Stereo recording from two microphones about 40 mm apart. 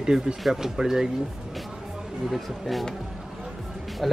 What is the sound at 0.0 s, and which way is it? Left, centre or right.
Speech, centre.